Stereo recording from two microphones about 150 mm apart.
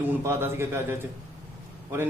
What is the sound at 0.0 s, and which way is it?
A man's voice, 15° right (ahead or behind).